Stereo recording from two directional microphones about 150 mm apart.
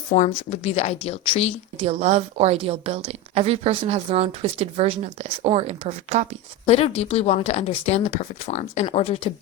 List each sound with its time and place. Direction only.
0.2 s speech: 45° left (ahead or behind)
1.8 s a woman's voice: 45° right (ahead or behind)
6.7 s speech: 40° left (ahead or behind)